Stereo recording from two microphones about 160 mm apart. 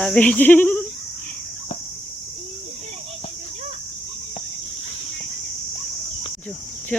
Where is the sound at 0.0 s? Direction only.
5° left (ahead or behind).